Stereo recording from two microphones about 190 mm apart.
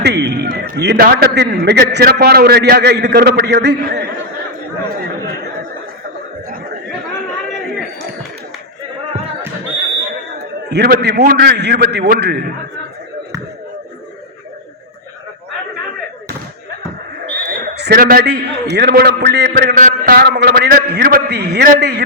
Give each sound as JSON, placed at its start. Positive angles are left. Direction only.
{"t": 0.0, "sound": "a man's voice", "side_deg": -60}
{"t": 10.3, "sound": "a sound", "side_deg": -60}
{"t": 11.2, "sound": "a man's voice", "side_deg": -55}
{"t": 17.4, "sound": "a man's voice", "side_deg": -60}
{"t": 19.7, "sound": "a man's voice", "side_deg": -45}